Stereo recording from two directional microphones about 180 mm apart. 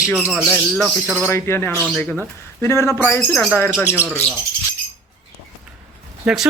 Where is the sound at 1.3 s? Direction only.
15° left (ahead or behind).